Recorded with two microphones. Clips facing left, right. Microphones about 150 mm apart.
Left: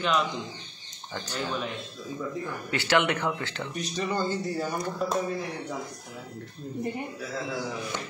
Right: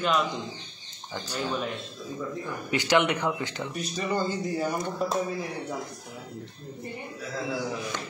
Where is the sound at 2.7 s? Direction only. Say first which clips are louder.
Right 1 dB; 15° right (ahead or behind).